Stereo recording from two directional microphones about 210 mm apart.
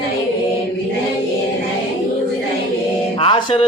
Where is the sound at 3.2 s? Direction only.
25° left (ahead or behind).